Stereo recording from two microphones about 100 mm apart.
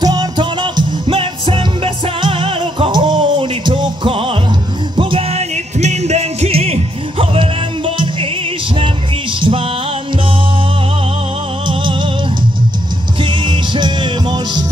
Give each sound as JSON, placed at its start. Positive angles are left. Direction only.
{"t": 0.0, "sound": "music", "side_deg": -40}
{"t": 0.4, "sound": "music", "side_deg": -55}
{"t": 6.1, "sound": "music", "side_deg": -90}
{"t": 7.3, "sound": "music", "side_deg": -60}
{"t": 9.4, "sound": "music", "side_deg": -60}
{"t": 11.6, "sound": "music", "side_deg": -50}
{"t": 13.2, "sound": "music", "side_deg": -50}